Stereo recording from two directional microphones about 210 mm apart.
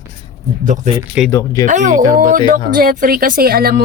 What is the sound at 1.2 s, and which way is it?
Speech, 5° right (ahead or behind).